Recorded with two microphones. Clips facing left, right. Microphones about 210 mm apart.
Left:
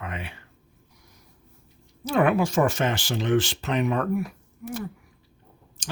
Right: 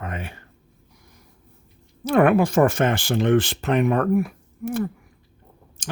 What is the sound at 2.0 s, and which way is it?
Speech, 55° right (ahead or behind).